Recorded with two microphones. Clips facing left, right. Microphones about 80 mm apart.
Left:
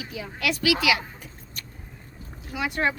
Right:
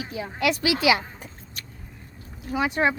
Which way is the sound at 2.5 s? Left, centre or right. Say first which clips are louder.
Right 3 dB; right.